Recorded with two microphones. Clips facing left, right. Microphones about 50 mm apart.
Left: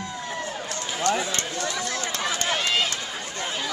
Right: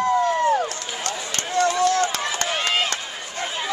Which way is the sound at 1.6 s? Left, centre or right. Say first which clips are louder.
Right 10 dB; right.